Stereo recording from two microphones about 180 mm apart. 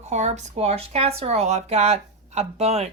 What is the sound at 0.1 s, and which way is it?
Speech, 40° right (ahead or behind).